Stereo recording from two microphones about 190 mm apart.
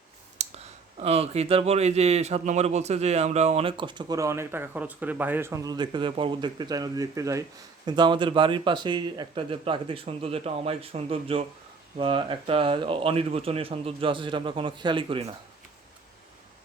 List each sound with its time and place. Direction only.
0.3 s speech: 35° right (ahead or behind)